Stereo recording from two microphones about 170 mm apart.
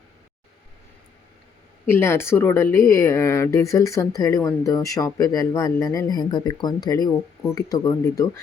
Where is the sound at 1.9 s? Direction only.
15° left (ahead or behind).